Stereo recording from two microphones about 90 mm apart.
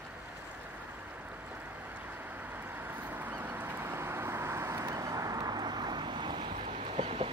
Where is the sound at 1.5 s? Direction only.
20° right (ahead or behind).